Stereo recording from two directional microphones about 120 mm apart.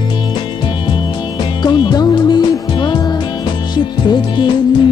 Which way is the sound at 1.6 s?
40° left (ahead or behind).